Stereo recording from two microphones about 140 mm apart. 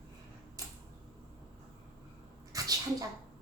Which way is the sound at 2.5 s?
25° right (ahead or behind).